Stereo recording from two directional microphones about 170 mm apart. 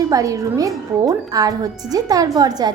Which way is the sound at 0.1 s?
20° right (ahead or behind).